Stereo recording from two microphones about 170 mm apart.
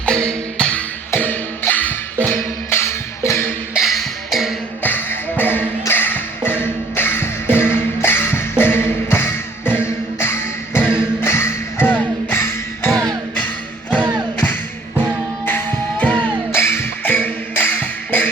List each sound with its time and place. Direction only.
0.0 s music: 5° left (ahead or behind)
3.8 s music: centre (ahead or behind)
4.8 s music: 10° left (ahead or behind)
10.8 s music: 15° left (ahead or behind)
12.9 s music: 20° right (ahead or behind)
15.4 s music: 10° left (ahead or behind)